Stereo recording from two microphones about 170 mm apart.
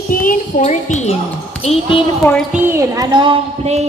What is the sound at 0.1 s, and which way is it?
A child's voice, 55° left (ahead or behind).